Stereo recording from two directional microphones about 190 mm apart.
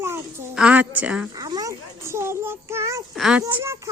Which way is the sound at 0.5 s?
5° right (ahead or behind).